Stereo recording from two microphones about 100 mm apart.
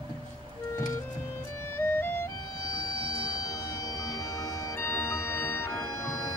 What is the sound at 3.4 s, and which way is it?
Music, 40° left (ahead or behind).